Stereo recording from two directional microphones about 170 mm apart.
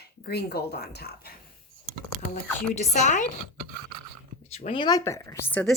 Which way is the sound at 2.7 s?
45° left (ahead or behind).